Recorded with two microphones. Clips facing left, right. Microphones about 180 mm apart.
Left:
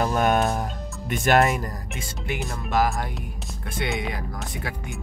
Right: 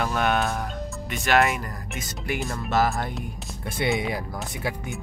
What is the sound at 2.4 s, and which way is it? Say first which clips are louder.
Speech: even; centre (ahead or behind).